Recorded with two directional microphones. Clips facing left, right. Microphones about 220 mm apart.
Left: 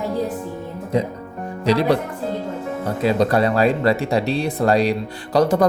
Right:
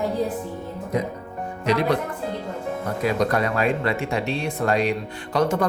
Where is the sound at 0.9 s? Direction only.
30° left (ahead or behind).